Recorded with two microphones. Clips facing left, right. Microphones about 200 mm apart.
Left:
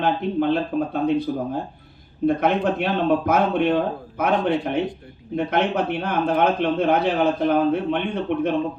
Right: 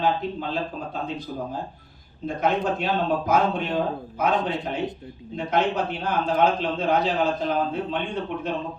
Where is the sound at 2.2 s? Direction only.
60° left (ahead or behind).